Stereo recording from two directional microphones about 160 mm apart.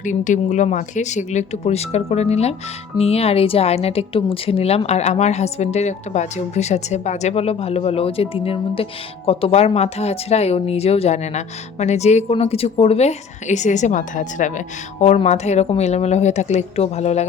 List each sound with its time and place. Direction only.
0.0 s a woman's voice: 50° left (ahead or behind)